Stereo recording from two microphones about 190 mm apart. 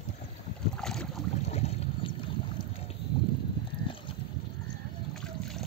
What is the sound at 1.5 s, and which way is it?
Boat, 30° left (ahead or behind).